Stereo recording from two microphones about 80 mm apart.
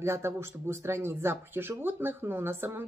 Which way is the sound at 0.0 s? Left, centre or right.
Right.